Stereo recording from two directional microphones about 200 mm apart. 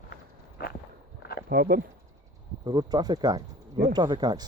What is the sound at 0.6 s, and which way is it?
Walk, 50° left (ahead or behind).